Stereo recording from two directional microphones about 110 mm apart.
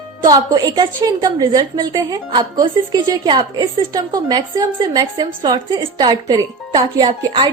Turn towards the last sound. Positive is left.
turn(degrees=-40)  # may be behind; listen again after turning